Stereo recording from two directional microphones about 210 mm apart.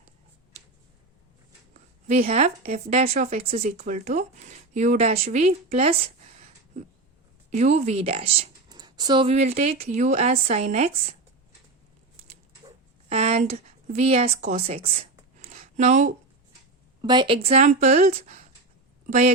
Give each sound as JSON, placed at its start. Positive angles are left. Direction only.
{"t": 2.0, "sound": "speech", "side_deg": -30}
{"t": 7.5, "sound": "speech", "side_deg": -35}
{"t": 13.1, "sound": "speech", "side_deg": -30}
{"t": 15.4, "sound": "a sound", "side_deg": -35}
{"t": 17.0, "sound": "speech", "side_deg": -20}